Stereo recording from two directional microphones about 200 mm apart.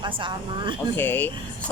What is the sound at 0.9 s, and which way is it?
Speech, 10° left (ahead or behind).